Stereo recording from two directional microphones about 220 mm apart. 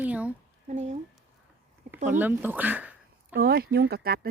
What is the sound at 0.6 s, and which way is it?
Speech, 30° right (ahead or behind).